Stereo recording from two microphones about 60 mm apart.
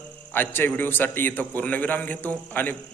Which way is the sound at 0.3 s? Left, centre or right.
Left.